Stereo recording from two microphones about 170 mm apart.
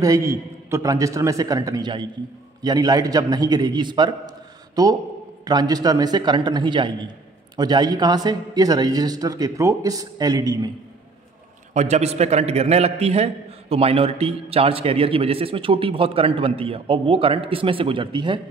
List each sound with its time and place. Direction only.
0.0 s speech: 20° right (ahead or behind)
11.7 s a man's voice: 40° right (ahead or behind)